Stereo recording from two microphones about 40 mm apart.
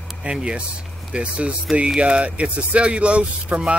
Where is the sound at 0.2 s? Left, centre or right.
Right.